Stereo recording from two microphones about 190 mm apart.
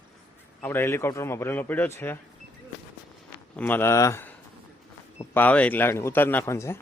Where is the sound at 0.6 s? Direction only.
10° left (ahead or behind).